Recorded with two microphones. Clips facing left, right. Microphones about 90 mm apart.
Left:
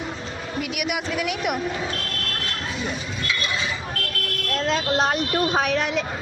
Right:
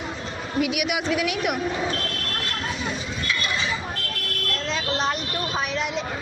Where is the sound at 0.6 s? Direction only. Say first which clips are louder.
Right 3 dB; 5° right (ahead or behind).